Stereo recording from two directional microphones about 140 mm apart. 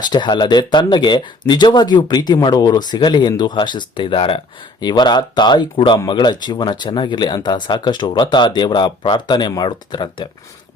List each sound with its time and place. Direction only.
0.0 s speech: 30° left (ahead or behind)